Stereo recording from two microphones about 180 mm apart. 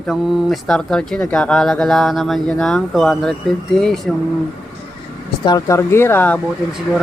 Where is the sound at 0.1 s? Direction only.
Centre (ahead or behind).